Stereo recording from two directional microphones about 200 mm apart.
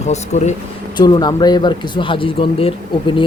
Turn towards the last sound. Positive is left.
turn(degrees=25)  # may be behind; listen again after turning